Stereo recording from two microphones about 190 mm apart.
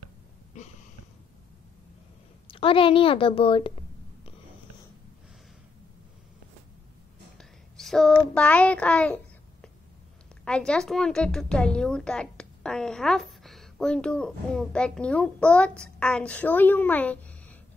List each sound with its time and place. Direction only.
0.5 s a sound: 40° left (ahead or behind)
2.5 s a woman's voice: 30° left (ahead or behind)
7.3 s whispering: centre (ahead or behind)
8.4 s a child's voice: 5° left (ahead or behind)